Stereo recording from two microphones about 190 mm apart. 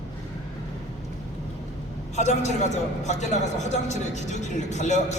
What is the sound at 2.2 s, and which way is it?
A man's voice, 40° left (ahead or behind).